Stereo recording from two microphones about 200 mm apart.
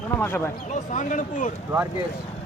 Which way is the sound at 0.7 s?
40° left (ahead or behind).